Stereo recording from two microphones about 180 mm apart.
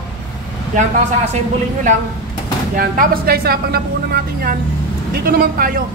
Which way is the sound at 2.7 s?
50° right (ahead or behind).